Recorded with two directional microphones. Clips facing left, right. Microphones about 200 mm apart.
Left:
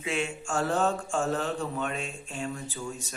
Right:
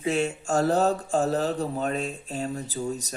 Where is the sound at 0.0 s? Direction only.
40° right (ahead or behind).